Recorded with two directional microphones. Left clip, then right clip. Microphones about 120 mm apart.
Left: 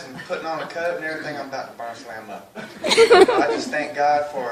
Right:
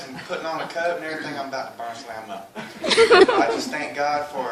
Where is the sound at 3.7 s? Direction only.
40° right (ahead or behind).